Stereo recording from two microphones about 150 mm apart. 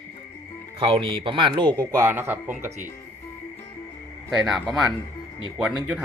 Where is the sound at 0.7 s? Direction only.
35° right (ahead or behind).